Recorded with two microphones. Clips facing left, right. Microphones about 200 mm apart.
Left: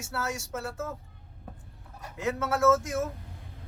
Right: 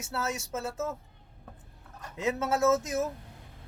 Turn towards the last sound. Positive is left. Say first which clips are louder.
# left 1 dB
turn(degrees=-20)  # may be behind; listen again after turning